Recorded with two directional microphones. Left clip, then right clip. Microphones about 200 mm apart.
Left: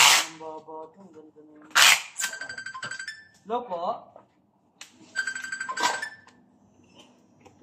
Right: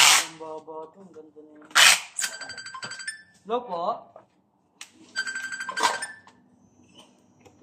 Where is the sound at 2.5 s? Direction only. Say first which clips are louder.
Left 2 dB; 50° right (ahead or behind).